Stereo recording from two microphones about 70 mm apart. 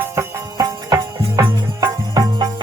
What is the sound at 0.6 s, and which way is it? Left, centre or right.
Music, right.